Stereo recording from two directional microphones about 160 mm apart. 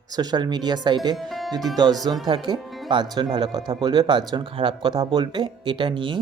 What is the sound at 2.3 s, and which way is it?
Speech, 30° right (ahead or behind).